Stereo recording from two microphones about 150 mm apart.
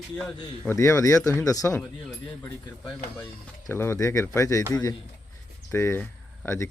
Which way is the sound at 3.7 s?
20° left (ahead or behind).